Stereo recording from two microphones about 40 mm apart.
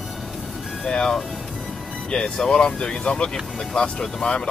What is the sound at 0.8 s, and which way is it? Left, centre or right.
Speech, centre.